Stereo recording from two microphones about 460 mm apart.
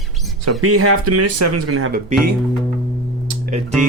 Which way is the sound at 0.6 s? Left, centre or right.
Right.